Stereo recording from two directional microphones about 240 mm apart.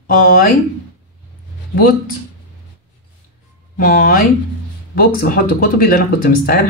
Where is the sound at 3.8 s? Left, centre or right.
Left.